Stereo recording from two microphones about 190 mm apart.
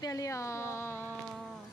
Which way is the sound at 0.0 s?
15° left (ahead or behind).